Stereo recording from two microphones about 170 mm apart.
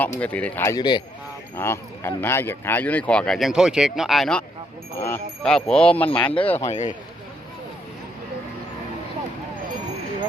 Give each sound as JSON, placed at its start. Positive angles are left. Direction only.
{"t": 0.0, "sound": "speech", "side_deg": 10}
{"t": 1.5, "sound": "speech", "side_deg": 15}
{"t": 4.9, "sound": "speech", "side_deg": 15}
{"t": 6.2, "sound": "speech", "side_deg": 30}
{"t": 6.7, "sound": "speech", "side_deg": 45}